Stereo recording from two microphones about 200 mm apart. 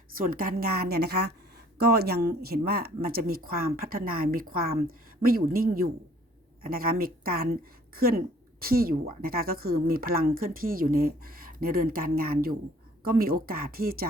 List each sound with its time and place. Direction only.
0.2 s speech: 45° right (ahead or behind)